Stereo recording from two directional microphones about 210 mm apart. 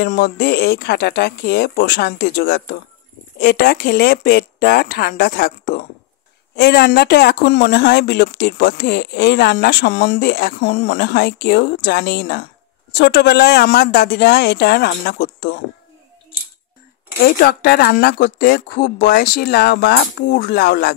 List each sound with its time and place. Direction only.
0.0 s speech: 50° left (ahead or behind)
17.4 s speech: 50° left (ahead or behind)